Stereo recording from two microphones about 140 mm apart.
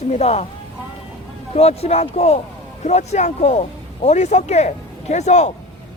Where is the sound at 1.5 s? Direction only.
50° left (ahead or behind).